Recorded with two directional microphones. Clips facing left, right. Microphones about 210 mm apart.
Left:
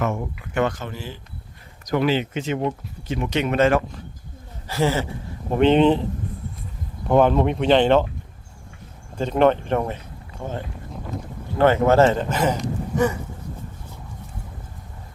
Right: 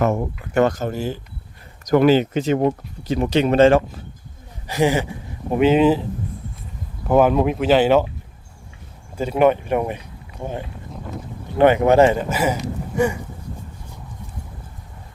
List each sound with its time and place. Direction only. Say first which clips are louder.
0.0 s speech: right 5 dB; 40° right (ahead or behind)
4.7 s speech: right 3 dB; 15° right (ahead or behind)
7.1 s speech: right 1 dB; 5° right (ahead or behind)
9.1 s speech: right 1 dB; 10° right (ahead or behind)
10.9 s a sound: right 1 dB; centre (ahead or behind)
11.5 s speech: right 2 dB; 15° right (ahead or behind)